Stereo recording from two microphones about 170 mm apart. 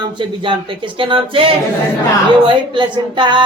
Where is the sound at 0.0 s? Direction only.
30° right (ahead or behind).